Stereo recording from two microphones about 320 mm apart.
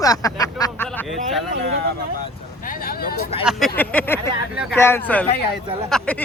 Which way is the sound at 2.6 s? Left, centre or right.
Left.